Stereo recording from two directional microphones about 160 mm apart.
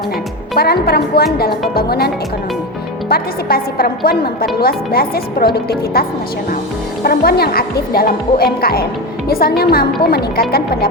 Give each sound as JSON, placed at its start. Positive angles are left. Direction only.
{"t": 0.5, "sound": "speech", "side_deg": 75}